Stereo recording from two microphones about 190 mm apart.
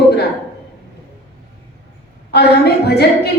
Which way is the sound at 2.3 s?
60° left (ahead or behind).